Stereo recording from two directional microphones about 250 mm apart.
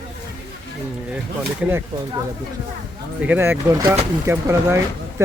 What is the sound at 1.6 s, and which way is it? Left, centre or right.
Speech, centre.